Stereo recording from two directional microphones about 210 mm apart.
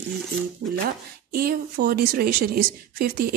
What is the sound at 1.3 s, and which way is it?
A woman's voice, 45° right (ahead or behind).